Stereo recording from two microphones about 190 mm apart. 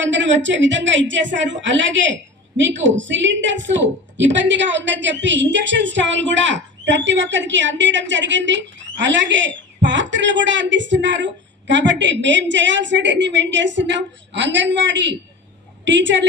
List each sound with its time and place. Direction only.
0.0 s a woman's voice: 75° right (ahead or behind)